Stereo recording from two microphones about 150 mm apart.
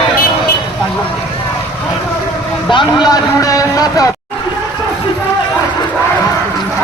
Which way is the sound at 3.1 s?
20° left (ahead or behind).